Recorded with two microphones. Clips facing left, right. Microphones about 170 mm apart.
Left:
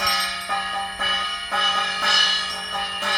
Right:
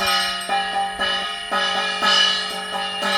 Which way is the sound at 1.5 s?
65° right (ahead or behind).